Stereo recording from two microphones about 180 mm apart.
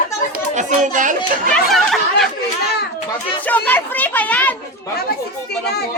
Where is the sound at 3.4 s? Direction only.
10° left (ahead or behind).